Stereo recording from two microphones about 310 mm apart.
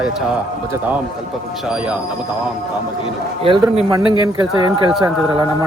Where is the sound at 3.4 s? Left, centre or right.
Centre.